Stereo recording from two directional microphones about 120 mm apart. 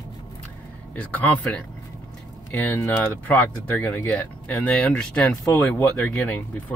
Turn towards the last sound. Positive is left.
turn(degrees=10)  # may be behind; listen again after turning